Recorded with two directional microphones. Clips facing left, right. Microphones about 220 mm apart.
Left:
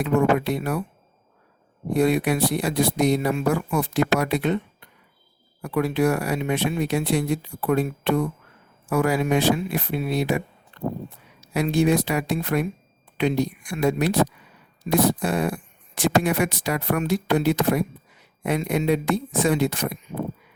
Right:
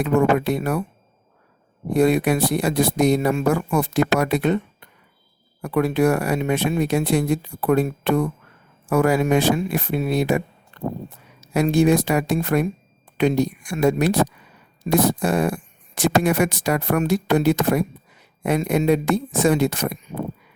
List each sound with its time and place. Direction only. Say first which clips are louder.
0.0 s speech: right 2 dB; 45° right (ahead or behind)
1.9 s speech: right 3 dB; 45° right (ahead or behind)
5.6 s speech: right 3 dB; 50° right (ahead or behind)